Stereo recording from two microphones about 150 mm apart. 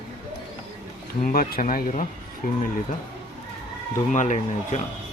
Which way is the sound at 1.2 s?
70° left (ahead or behind).